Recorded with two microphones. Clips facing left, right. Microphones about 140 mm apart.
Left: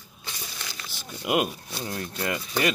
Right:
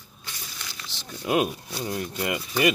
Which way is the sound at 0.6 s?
10° left (ahead or behind).